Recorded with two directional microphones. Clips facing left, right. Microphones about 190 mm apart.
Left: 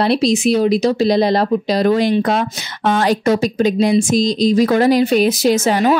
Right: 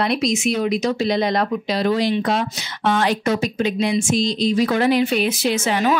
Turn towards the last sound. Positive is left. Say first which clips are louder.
# left 5 dB
turn(degrees=40)  # may be behind; listen again after turning